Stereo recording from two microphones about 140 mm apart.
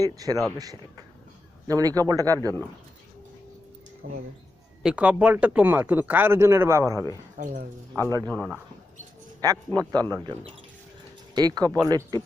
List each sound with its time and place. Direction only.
0.0 s a man's voice: 25° right (ahead or behind)
1.6 s a man's voice: 25° right (ahead or behind)
4.8 s speech: 5° right (ahead or behind)
7.3 s speech: 65° right (ahead or behind)
7.9 s a man's voice: 25° right (ahead or behind)
9.4 s a man's voice: 25° right (ahead or behind)
11.3 s a man's voice: 30° right (ahead or behind)